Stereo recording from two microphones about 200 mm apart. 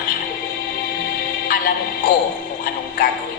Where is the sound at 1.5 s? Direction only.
45° left (ahead or behind).